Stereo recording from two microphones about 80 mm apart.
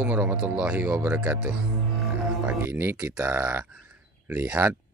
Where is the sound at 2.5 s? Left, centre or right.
Right.